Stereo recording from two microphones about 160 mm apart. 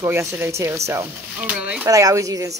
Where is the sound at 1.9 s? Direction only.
20° right (ahead or behind).